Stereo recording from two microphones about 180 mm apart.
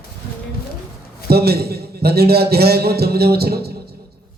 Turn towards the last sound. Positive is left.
turn(degrees=-60)  # may be behind; listen again after turning